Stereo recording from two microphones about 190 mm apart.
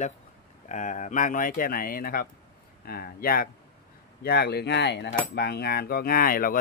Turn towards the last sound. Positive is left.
turn(degrees=50)  # may be behind; listen again after turning